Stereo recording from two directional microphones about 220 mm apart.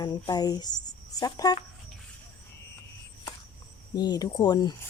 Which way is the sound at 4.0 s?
15° left (ahead or behind).